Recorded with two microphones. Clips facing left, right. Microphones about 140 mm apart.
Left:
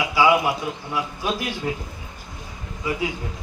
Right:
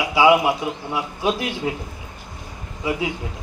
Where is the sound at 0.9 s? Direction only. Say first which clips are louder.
Right 3 dB; 25° right (ahead or behind).